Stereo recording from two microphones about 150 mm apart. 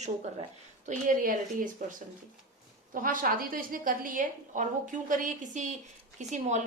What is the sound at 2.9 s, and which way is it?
A woman's voice, 65° right (ahead or behind).